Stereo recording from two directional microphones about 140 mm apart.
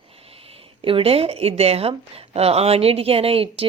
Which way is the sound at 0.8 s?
40° right (ahead or behind).